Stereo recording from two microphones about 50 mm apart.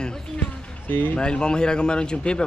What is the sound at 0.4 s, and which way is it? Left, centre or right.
Basketball bounce, left.